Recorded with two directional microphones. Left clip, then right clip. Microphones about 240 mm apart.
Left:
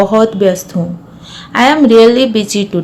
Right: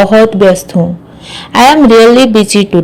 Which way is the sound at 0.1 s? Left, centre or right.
Right.